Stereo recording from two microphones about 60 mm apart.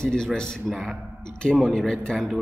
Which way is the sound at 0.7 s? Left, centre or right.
Centre.